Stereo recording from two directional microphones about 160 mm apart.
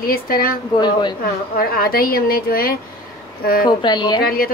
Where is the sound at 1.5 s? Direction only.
70° left (ahead or behind).